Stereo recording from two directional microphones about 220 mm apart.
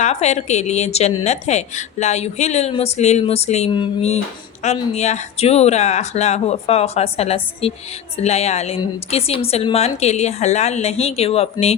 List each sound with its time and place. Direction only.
0.0 s speech: 30° left (ahead or behind)